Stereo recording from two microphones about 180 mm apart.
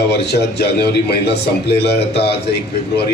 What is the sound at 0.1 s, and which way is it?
A man's voice, 65° left (ahead or behind).